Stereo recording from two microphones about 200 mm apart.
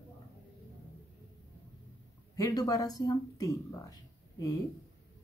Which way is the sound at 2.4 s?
20° left (ahead or behind).